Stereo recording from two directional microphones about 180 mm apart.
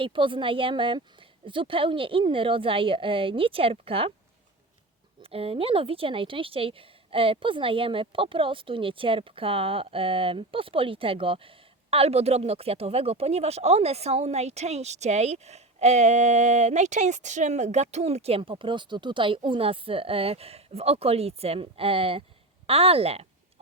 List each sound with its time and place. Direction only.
0.0 s speech: 30° right (ahead or behind)
5.2 s speech: 35° right (ahead or behind)